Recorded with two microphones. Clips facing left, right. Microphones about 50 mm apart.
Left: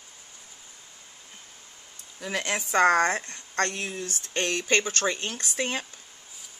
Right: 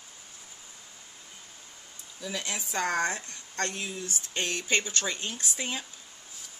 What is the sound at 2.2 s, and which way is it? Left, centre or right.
Speech, left.